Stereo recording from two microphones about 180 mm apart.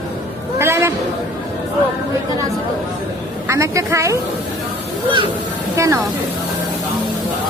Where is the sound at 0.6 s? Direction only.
15° right (ahead or behind).